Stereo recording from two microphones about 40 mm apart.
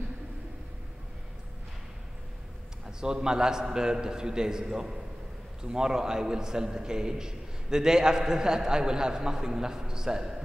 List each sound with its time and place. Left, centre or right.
3.0 s a man's voice: centre